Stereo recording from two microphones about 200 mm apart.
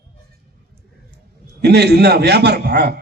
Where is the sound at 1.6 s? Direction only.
55° right (ahead or behind).